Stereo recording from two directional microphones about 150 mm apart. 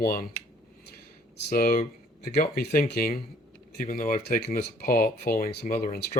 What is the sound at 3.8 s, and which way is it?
Speech, 70° left (ahead or behind).